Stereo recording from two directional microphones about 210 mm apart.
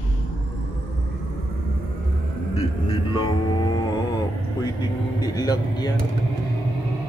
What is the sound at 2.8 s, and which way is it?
Music, 20° left (ahead or behind).